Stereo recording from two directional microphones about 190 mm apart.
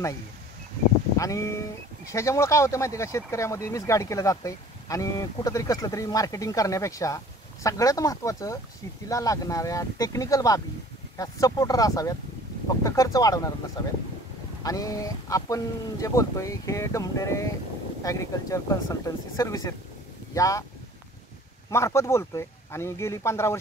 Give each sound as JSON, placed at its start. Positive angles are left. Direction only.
{"t": 1.1, "sound": "a sound", "side_deg": 15}
{"t": 2.0, "sound": "speech", "side_deg": 15}
{"t": 14.6, "sound": "speech", "side_deg": 20}
{"t": 21.6, "sound": "speech", "side_deg": 15}